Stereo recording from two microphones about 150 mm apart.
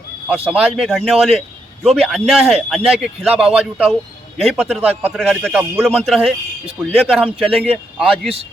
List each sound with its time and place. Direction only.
0.3 s speech: 5° right (ahead or behind)